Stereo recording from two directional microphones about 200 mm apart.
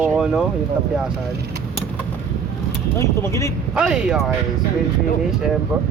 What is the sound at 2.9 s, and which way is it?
Speech, 15° left (ahead or behind).